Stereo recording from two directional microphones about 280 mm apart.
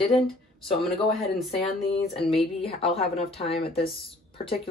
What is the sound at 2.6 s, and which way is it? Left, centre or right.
Speech, left.